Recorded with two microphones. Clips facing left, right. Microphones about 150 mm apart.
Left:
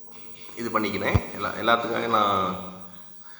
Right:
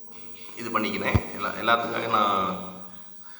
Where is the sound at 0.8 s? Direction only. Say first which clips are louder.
Left 1 dB; 40° left (ahead or behind).